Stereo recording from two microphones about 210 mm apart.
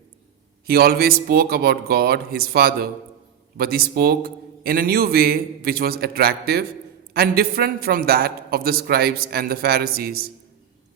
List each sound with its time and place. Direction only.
0.7 s a man's voice: 45° right (ahead or behind)